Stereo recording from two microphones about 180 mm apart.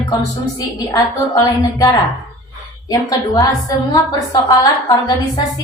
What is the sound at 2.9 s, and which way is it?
Speech, 20° left (ahead or behind).